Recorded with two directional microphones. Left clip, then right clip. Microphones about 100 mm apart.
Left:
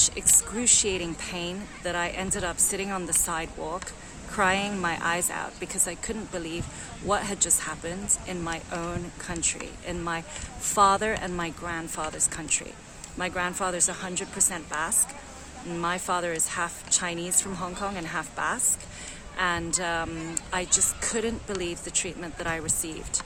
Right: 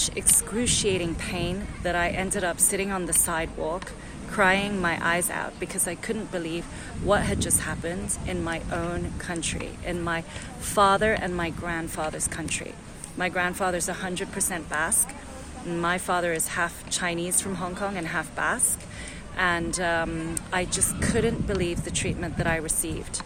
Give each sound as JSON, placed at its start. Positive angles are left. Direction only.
{"t": 0.3, "sound": "a woman's voice", "side_deg": 40}